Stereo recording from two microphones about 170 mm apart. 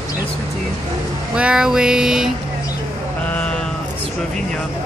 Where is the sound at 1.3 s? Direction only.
5° right (ahead or behind).